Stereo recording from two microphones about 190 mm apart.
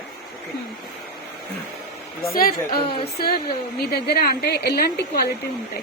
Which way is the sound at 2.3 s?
50° left (ahead or behind).